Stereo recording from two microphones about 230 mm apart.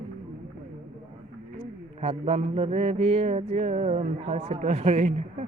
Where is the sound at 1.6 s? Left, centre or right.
Right.